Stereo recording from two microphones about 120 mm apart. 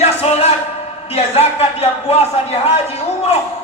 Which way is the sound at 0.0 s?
55° left (ahead or behind).